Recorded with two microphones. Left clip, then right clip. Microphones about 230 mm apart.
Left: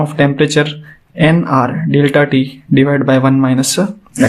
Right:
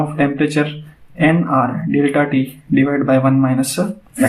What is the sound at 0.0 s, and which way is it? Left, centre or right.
Speech, left.